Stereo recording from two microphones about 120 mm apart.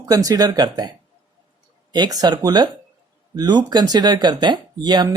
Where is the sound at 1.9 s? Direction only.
35° right (ahead or behind).